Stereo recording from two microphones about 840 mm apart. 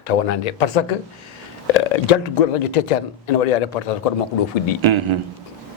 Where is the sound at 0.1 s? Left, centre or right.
Left.